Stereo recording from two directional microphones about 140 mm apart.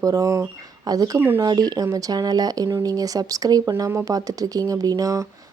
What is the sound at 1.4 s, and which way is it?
Speech, 30° right (ahead or behind).